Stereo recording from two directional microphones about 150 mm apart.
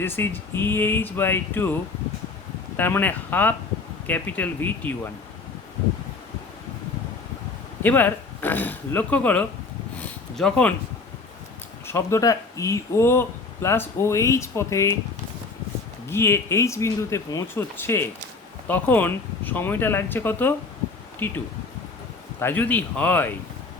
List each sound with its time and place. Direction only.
0.0 s speech: 15° left (ahead or behind)
2.7 s speech: 15° left (ahead or behind)
7.8 s speech: 10° left (ahead or behind)
10.0 s a sound: 5° left (ahead or behind)
11.9 s speech: 20° left (ahead or behind)
16.0 s speech: 15° left (ahead or behind)
22.4 s speech: 15° left (ahead or behind)